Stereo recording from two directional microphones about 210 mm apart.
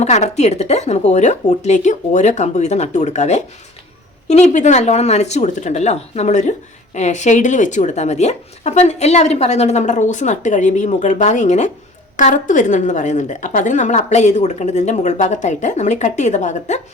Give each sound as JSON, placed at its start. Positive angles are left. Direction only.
{"t": 0.0, "sound": "speech", "side_deg": 30}